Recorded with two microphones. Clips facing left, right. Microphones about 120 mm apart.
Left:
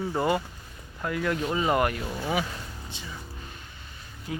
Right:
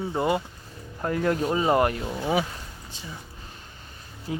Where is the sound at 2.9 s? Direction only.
40° right (ahead or behind).